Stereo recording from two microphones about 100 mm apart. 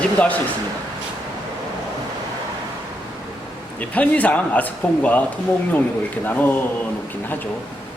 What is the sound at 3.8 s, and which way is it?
Speech, 15° left (ahead or behind).